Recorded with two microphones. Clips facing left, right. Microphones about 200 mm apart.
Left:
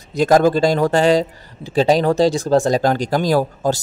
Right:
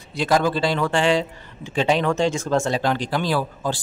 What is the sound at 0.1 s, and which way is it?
Speech, 45° left (ahead or behind).